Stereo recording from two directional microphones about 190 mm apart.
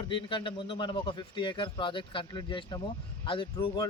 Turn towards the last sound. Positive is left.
turn(degrees=25)  # may be behind; listen again after turning